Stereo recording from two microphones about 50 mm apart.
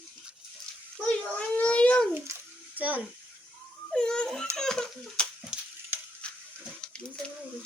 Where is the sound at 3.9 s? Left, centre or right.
Centre.